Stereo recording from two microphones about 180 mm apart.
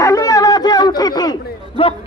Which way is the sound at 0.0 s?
20° left (ahead or behind).